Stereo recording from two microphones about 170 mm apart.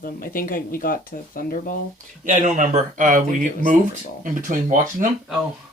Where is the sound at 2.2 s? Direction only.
50° right (ahead or behind).